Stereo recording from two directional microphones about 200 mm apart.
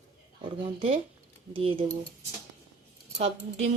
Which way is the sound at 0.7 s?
25° right (ahead or behind).